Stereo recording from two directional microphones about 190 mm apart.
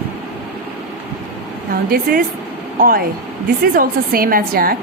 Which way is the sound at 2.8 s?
50° right (ahead or behind).